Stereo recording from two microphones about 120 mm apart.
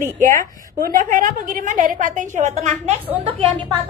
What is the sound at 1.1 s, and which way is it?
A woman's voice, 90° right.